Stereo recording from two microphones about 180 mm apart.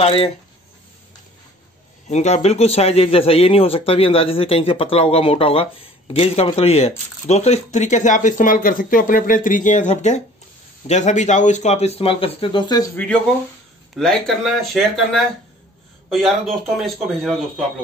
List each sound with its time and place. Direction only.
0.0 s speech: 35° left (ahead or behind)
2.0 s speech: 40° left (ahead or behind); by 12.9 s 20° left (ahead or behind)
12.9 s a man's voice: 5° left (ahead or behind)